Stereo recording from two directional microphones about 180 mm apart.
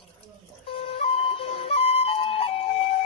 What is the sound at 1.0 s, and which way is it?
Music, 30° left (ahead or behind).